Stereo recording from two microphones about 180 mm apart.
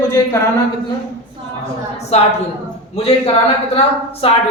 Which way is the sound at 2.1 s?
35° left (ahead or behind).